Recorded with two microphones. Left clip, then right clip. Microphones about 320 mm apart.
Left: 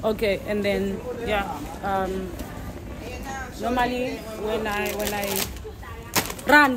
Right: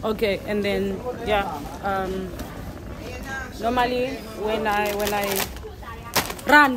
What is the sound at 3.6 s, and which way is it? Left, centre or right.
Speech, centre.